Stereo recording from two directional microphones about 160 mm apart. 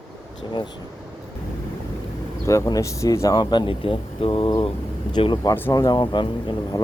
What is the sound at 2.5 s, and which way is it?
Speech, 20° left (ahead or behind).